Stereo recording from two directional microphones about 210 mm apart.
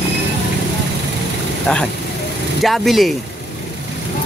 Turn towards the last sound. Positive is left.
turn(degrees=0)  # may be behind; listen again after turning